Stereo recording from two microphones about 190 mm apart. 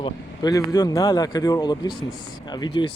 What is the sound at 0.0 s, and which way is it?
Speech, 20° left (ahead or behind).